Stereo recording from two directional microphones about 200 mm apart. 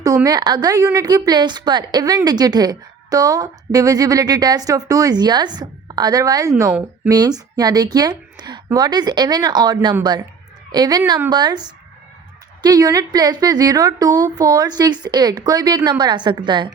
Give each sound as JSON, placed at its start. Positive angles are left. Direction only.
{"t": 0.0, "sound": "a woman's voice", "side_deg": -15}
{"t": 6.7, "sound": "speech", "side_deg": -5}
{"t": 7.1, "sound": "a woman's voice", "side_deg": -20}